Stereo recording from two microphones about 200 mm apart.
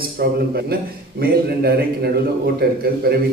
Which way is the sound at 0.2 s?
50° right (ahead or behind).